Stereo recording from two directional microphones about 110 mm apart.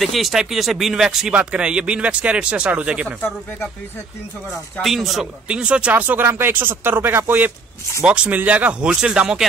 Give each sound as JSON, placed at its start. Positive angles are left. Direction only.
{"t": 0.0, "sound": "speech", "side_deg": 0}
{"t": 4.8, "sound": "speech", "side_deg": 0}